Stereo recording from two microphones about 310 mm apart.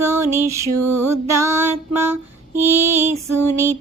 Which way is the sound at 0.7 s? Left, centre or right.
Right.